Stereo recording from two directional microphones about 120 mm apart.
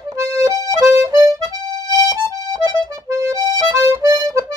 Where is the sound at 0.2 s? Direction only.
25° right (ahead or behind).